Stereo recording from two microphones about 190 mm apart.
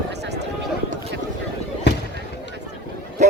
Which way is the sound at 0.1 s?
60° right (ahead or behind).